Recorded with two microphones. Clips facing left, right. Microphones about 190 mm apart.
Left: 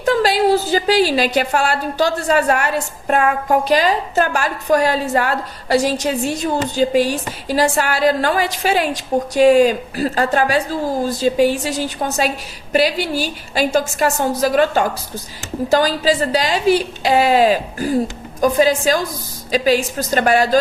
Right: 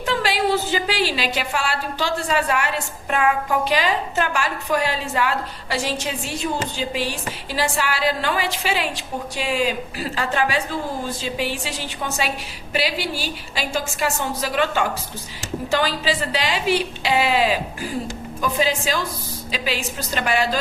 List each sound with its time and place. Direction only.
0.0 s a woman's voice: 40° left (ahead or behind)